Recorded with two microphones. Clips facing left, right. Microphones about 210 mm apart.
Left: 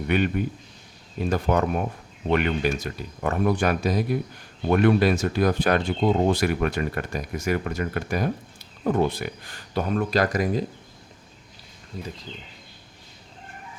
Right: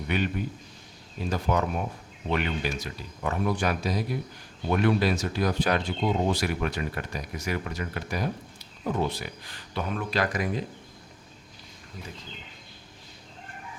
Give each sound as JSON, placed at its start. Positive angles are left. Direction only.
{"t": 0.1, "sound": "speech", "side_deg": 55}
{"t": 1.3, "sound": "speech", "side_deg": 55}